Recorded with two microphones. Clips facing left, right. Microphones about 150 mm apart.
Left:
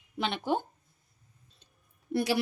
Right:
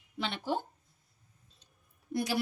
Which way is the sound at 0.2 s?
60° left (ahead or behind).